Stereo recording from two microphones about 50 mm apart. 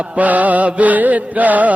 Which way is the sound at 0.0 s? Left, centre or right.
Right.